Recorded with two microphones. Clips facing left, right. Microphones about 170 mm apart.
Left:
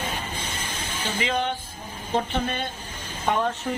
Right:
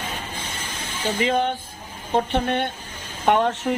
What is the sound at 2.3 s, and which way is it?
Speech, 60° right (ahead or behind).